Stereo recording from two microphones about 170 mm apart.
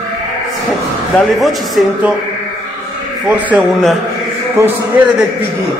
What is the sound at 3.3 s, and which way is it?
Speech, 5° right (ahead or behind).